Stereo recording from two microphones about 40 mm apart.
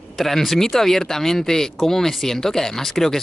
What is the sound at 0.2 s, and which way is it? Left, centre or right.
Speech, centre.